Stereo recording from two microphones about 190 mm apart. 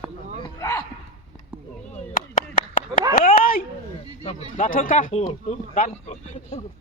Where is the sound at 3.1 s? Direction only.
45° left (ahead or behind).